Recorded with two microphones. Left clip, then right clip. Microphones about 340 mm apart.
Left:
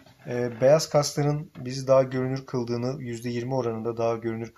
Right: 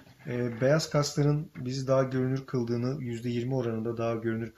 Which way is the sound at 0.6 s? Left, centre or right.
Centre.